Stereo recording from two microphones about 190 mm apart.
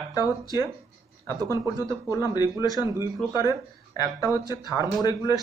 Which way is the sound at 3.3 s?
20° left (ahead or behind).